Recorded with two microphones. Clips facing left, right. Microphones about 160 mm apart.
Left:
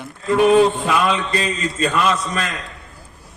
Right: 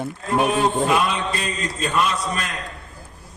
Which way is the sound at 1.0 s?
90° left.